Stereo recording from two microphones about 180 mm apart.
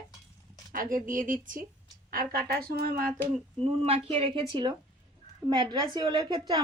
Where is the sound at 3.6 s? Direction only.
35° right (ahead or behind).